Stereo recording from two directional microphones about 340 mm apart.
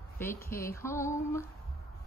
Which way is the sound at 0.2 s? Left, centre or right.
Centre.